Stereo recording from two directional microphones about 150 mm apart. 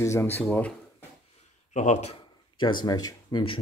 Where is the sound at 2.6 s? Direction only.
30° left (ahead or behind).